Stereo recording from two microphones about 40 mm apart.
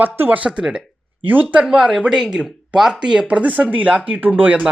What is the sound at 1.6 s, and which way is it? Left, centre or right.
Speech, centre.